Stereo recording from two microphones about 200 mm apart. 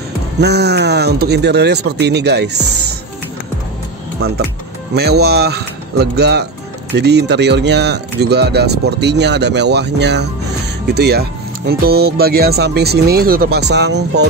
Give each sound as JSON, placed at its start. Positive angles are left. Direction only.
{"t": 0.4, "sound": "speech", "side_deg": -55}
{"t": 4.2, "sound": "speech", "side_deg": -50}